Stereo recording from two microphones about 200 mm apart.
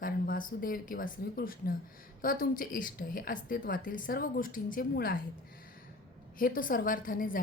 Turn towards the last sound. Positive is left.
turn(degrees=45)  # may be behind; listen again after turning